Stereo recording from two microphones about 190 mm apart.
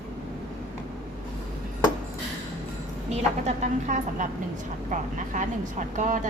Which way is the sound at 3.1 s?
40° right (ahead or behind).